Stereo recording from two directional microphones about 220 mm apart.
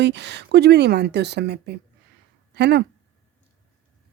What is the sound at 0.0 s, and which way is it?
A woman's voice, 50° right (ahead or behind).